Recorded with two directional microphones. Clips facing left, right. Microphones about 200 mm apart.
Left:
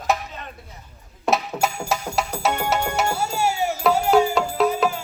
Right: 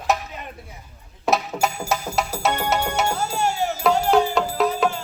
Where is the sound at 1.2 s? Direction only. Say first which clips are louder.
Even; centre (ahead or behind).